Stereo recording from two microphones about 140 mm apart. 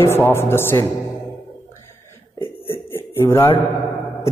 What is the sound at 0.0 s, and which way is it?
Speech, 15° left (ahead or behind).